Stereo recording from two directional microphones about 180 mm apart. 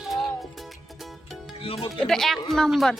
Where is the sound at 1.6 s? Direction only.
30° left (ahead or behind).